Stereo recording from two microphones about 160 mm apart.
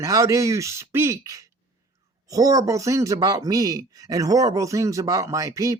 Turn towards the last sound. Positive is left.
turn(degrees=-20)  # may be behind; listen again after turning